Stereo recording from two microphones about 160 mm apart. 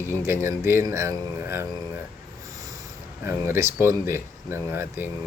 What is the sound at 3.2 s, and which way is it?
Speech, 15° right (ahead or behind).